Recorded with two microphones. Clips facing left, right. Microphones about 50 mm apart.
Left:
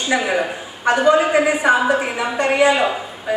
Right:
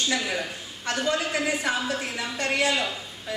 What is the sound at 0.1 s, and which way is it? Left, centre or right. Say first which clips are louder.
Speech: left 9 dB; left.